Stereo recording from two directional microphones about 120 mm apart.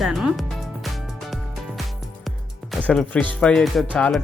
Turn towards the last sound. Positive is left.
turn(degrees=5)  # may be behind; listen again after turning